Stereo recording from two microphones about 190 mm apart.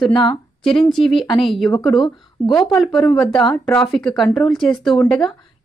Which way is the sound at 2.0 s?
20° left (ahead or behind).